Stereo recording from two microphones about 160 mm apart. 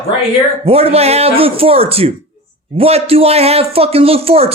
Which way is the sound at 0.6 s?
40° right (ahead or behind).